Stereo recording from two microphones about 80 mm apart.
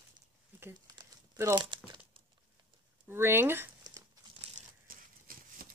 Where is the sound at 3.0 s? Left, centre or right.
Right.